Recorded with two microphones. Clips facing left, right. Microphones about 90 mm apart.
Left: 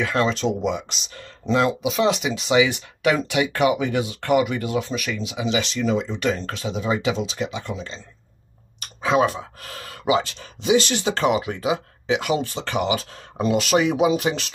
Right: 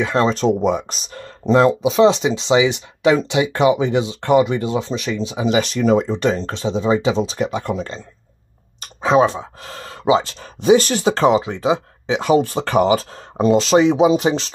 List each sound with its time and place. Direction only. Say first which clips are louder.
0.0 s speech: right 5 dB; 30° right (ahead or behind); by 8.0 s 50° right (ahead or behind)
9.0 s speech: right 5 dB; 30° right (ahead or behind)